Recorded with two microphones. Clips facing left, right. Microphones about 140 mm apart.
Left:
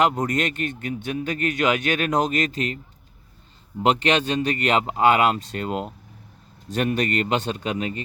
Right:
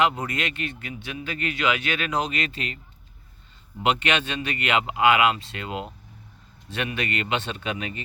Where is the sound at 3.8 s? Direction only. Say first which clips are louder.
Left 4 dB; 40° left (ahead or behind).